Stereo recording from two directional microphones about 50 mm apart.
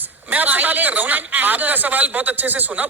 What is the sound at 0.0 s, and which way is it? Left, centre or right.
A man's voice, right.